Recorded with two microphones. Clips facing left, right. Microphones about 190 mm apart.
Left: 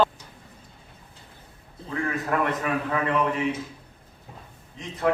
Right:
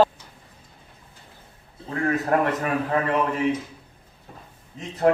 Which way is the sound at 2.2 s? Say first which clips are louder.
Right 1 dB; 40° right (ahead or behind).